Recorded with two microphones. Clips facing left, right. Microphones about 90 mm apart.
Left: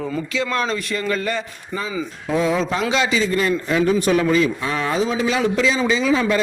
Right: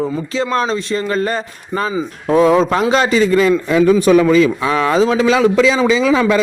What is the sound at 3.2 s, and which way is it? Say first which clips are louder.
Speech: right 7 dB; 90° right.